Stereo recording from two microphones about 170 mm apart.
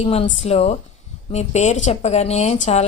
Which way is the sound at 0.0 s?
35° left (ahead or behind).